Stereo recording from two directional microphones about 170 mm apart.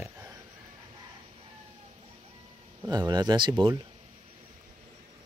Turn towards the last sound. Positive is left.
turn(degrees=-30)  # may be behind; listen again after turning